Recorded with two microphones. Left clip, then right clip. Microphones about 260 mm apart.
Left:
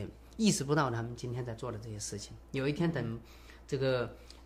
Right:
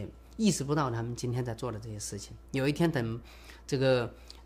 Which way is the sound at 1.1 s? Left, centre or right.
Right.